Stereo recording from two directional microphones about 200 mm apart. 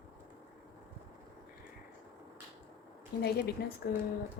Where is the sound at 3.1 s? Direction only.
50° left (ahead or behind).